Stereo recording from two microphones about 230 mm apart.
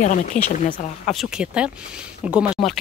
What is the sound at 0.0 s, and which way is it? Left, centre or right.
Speech, left.